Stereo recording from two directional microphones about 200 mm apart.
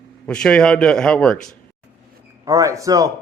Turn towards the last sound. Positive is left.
turn(degrees=-15)  # may be behind; listen again after turning